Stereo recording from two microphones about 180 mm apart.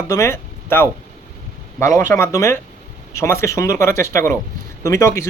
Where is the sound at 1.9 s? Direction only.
15° left (ahead or behind).